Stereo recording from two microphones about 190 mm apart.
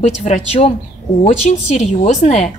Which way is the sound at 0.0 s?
35° left (ahead or behind).